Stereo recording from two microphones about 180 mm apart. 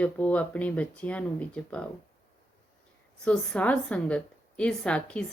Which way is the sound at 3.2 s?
5° left (ahead or behind).